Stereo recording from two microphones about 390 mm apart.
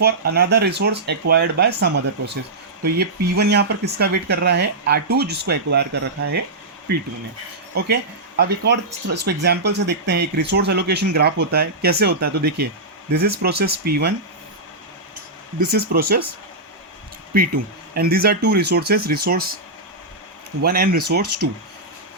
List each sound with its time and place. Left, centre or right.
0.0 s speech: right
7.7 s speech: right
15.7 s speech: right
17.3 s speech: right
20.6 s speech: right